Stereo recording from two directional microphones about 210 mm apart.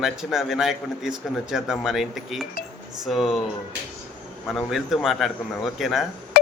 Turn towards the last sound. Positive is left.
turn(degrees=40)  # may be behind; listen again after turning